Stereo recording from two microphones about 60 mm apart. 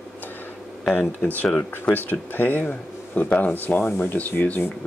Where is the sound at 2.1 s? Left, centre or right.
Left.